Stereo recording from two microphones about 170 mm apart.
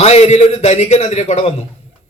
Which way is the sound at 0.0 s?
40° left (ahead or behind).